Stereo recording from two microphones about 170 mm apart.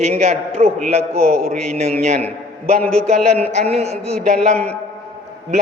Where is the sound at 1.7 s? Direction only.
40° right (ahead or behind).